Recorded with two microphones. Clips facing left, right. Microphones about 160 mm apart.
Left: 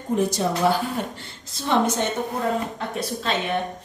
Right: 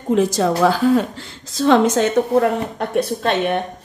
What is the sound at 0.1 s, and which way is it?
A woman's voice, 90° right.